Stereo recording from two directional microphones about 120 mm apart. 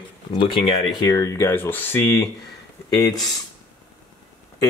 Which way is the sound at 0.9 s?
30° left (ahead or behind).